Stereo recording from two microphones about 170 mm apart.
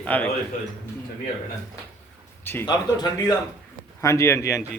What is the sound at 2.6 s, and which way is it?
A man's voice, 25° left (ahead or behind).